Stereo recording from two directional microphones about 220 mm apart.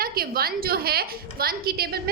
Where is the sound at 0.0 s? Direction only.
45° right (ahead or behind).